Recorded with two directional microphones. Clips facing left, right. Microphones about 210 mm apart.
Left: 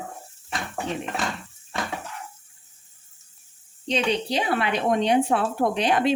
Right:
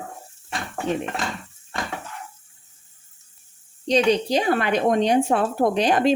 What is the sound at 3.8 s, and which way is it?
Speech, 40° right (ahead or behind).